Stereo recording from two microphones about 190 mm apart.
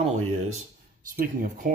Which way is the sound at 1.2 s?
50° right (ahead or behind).